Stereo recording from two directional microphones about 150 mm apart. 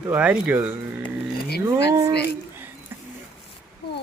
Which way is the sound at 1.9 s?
25° right (ahead or behind).